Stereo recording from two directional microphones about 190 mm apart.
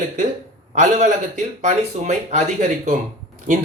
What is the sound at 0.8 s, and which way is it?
Speech, 40° right (ahead or behind).